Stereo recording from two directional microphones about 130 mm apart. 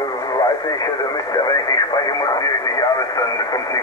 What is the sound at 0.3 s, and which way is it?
Speech, 30° left (ahead or behind).